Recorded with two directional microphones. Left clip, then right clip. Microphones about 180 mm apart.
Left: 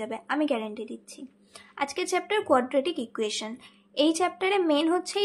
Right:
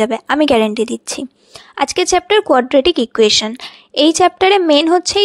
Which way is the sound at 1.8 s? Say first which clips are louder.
Right 14 dB; 50° right (ahead or behind).